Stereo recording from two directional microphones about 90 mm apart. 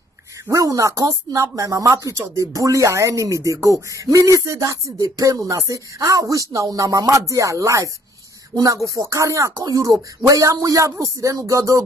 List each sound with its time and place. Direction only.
0.5 s speech: 35° right (ahead or behind)